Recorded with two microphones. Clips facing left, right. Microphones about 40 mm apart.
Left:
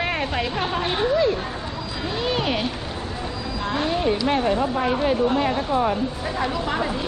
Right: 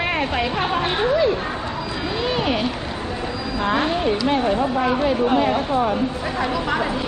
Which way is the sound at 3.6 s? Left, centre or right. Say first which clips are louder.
Right 5 dB; right.